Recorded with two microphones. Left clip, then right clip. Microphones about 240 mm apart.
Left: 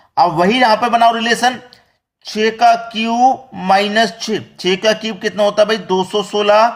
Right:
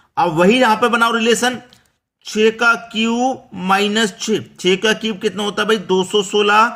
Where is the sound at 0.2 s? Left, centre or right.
Right.